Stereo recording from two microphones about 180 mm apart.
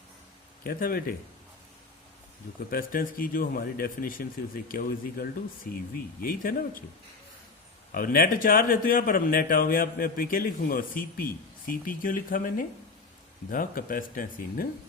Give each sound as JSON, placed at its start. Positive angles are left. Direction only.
{"t": 0.6, "sound": "speech", "side_deg": 55}
{"t": 2.6, "sound": "a man's voice", "side_deg": 55}
{"t": 7.9, "sound": "speech", "side_deg": 55}